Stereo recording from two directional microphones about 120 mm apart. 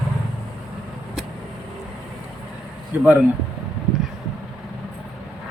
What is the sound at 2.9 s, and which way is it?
Speech, 15° right (ahead or behind).